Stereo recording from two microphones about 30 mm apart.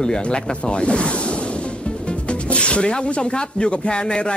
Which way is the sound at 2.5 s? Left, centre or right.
Left.